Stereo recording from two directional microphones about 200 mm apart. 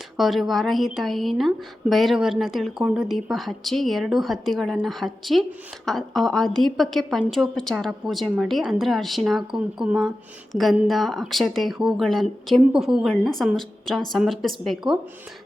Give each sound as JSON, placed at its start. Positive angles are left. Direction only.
{"t": 0.2, "sound": "a woman's voice", "side_deg": 0}